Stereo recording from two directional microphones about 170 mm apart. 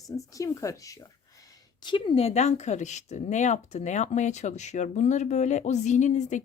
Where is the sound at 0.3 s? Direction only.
20° left (ahead or behind).